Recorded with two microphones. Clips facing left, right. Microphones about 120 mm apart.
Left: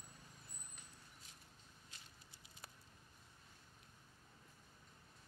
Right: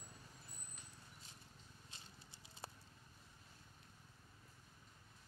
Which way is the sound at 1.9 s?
30° right (ahead or behind).